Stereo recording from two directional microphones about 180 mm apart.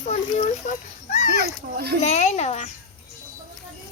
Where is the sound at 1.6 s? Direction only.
60° right (ahead or behind).